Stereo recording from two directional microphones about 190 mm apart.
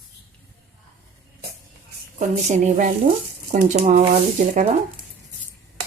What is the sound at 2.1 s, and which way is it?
Speech, 40° right (ahead or behind).